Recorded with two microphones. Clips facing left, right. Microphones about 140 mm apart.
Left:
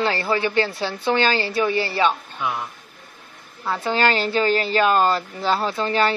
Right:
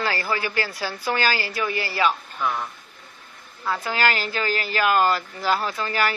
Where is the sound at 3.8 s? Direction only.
30° left (ahead or behind).